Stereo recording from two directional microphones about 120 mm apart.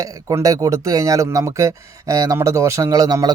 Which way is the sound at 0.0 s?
30° right (ahead or behind).